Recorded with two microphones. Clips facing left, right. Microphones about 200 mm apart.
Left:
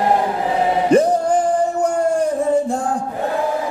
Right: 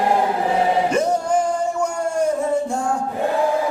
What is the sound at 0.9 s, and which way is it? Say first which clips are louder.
Music: left 5 dB; 35° left (ahead or behind).